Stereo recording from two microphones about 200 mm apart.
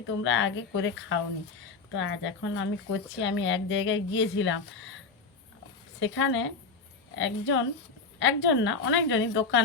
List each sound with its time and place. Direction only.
0.2 s a woman's voice: 70° left (ahead or behind)
2.0 s a woman's voice: 70° left (ahead or behind)
6.0 s a woman's voice: 70° left (ahead or behind)